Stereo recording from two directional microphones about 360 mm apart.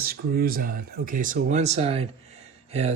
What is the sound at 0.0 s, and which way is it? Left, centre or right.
Speech, right.